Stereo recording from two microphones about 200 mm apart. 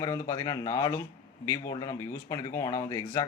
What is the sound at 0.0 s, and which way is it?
A man's voice, 20° left (ahead or behind).